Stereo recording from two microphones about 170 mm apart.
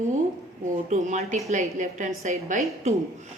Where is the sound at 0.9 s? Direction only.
40° right (ahead or behind).